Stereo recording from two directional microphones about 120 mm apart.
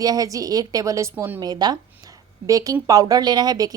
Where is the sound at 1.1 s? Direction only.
15° right (ahead or behind).